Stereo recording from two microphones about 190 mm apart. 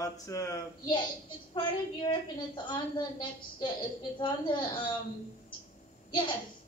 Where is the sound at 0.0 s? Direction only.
15° left (ahead or behind).